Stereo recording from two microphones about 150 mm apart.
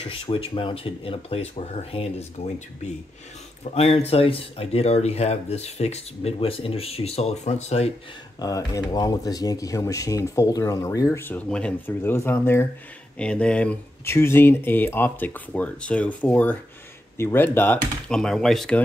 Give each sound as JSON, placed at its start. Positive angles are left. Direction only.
{"t": 0.0, "sound": "speech", "side_deg": 40}
{"t": 8.4, "sound": "speech", "side_deg": 25}